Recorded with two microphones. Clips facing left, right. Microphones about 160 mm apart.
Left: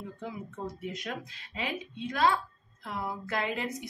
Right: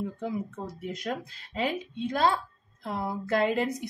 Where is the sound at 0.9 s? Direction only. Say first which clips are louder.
Right 5 dB; 40° right (ahead or behind).